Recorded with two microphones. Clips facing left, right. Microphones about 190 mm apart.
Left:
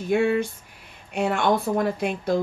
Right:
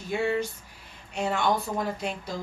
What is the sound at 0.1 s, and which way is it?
Speech, 60° left (ahead or behind).